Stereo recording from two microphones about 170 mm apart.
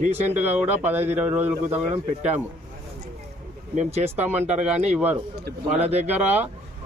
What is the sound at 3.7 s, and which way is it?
Speech, 40° right (ahead or behind).